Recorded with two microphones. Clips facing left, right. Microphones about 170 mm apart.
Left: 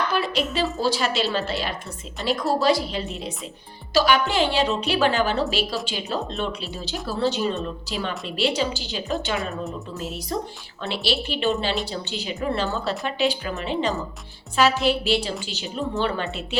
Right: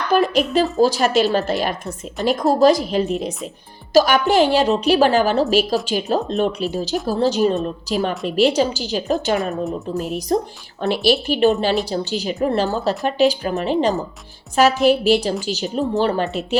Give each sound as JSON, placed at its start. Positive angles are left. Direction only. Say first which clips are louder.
{"t": 0.1, "sound": "a woman's voice", "louder": "right 8 dB", "side_deg": -45}